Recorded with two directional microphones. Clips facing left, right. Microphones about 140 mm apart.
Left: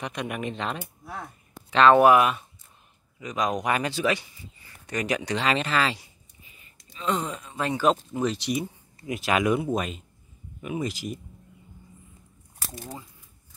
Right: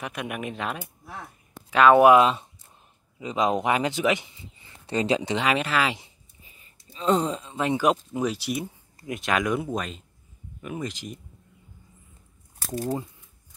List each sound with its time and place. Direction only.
0.0 s speech: 5° right (ahead or behind); by 5.4 s 25° right (ahead or behind)
5.4 s speech: 10° right (ahead or behind)
6.9 s speech: 35° right (ahead or behind); by 11.1 s 10° left (ahead or behind)